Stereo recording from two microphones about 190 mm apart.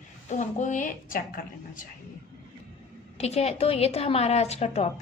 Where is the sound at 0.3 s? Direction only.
40° left (ahead or behind).